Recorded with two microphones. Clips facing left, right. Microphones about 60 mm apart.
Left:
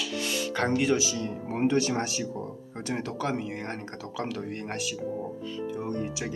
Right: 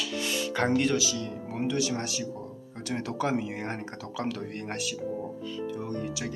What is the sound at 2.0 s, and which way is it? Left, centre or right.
Speech, left.